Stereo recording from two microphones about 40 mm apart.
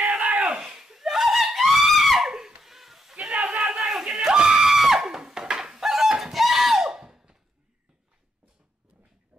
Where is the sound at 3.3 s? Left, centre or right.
Centre.